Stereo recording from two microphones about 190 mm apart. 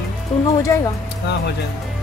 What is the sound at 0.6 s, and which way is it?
Speech, 15° left (ahead or behind).